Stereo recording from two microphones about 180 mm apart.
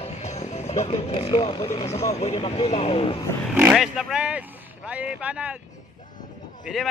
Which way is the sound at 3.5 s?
5° right (ahead or behind).